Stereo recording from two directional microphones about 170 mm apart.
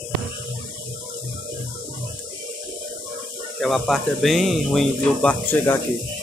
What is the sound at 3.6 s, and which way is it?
Speech, centre (ahead or behind).